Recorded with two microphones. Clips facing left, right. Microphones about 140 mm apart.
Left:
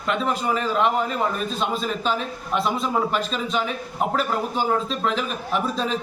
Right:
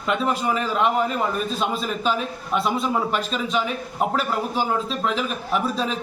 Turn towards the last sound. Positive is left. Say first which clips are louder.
# even
turn(degrees=0)  # may be behind; listen again after turning